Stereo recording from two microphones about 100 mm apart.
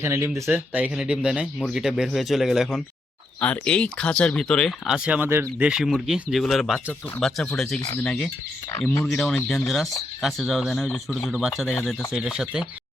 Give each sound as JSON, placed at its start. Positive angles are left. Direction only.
{"t": 0.0, "sound": "speech", "side_deg": -25}
{"t": 3.4, "sound": "speech", "side_deg": 15}
{"t": 4.9, "sound": "speech", "side_deg": -10}
{"t": 5.3, "sound": "speech", "side_deg": -25}
{"t": 5.6, "sound": "speech", "side_deg": -5}